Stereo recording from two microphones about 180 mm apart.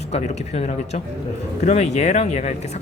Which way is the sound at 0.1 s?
40° left (ahead or behind).